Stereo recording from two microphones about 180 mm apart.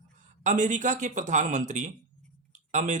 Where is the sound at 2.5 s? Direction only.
40° right (ahead or behind).